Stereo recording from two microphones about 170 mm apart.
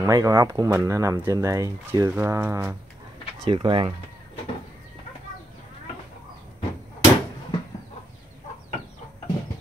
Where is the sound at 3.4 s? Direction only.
30° right (ahead or behind).